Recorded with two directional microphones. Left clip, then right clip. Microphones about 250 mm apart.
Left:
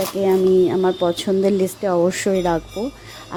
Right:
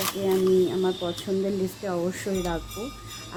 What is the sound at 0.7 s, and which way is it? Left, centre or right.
A woman's voice, left.